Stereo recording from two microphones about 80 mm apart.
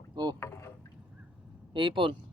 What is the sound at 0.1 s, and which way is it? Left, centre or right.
Rowboat, right.